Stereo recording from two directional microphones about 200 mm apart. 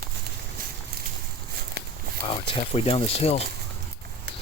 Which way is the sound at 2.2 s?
25° left (ahead or behind).